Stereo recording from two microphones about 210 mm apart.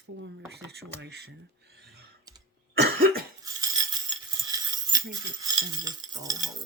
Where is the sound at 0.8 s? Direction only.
55° right (ahead or behind).